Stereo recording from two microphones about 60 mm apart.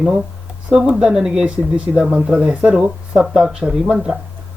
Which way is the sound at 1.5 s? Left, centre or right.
Right.